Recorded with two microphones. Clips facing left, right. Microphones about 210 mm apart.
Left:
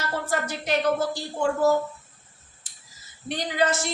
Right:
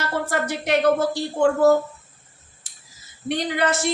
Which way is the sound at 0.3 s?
60° right (ahead or behind).